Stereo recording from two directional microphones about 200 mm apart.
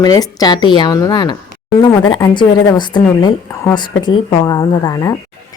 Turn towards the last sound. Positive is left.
turn(degrees=15)  # may be behind; listen again after turning